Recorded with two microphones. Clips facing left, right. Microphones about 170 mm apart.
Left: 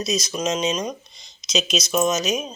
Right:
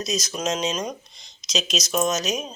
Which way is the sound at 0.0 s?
45° right (ahead or behind).